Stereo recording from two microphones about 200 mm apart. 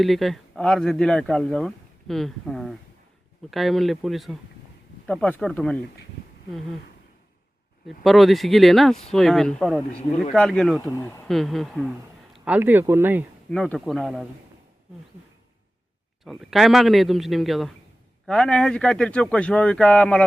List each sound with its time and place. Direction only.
0.0 s speech: centre (ahead or behind)
7.9 s speech: centre (ahead or behind)
10.8 s speech: 15° left (ahead or behind)
11.3 s speech: centre (ahead or behind)
13.5 s speech: 5° left (ahead or behind)
16.2 s speech: centre (ahead or behind)